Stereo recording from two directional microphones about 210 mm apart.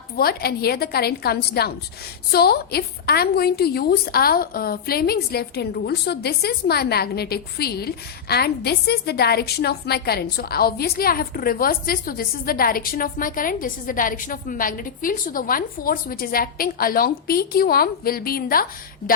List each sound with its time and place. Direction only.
0.2 s a woman's voice: 45° left (ahead or behind)